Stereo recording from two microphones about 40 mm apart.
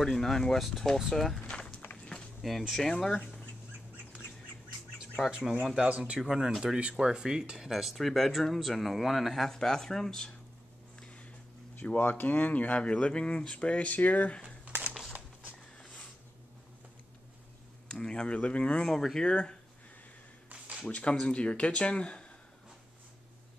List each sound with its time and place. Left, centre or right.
0.0 s speech: centre
1.5 s run: left
2.4 s speech: centre
2.8 s speech: centre
5.8 s speech: right
6.1 s speech: centre
7.7 s speech: centre
12.0 s speech: left
13.9 s speech: left
15.8 s a sound: left
17.9 s speech: left
18.9 s speech: centre
19.2 s speech: left
20.8 s speech: left